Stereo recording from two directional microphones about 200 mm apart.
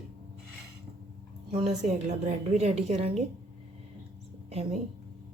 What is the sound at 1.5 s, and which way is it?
Speech, 35° right (ahead or behind).